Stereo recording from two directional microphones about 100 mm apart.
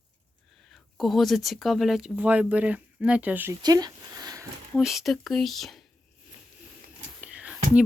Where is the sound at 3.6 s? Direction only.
40° right (ahead or behind).